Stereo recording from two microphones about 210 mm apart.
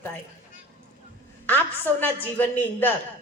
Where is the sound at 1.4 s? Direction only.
10° left (ahead or behind).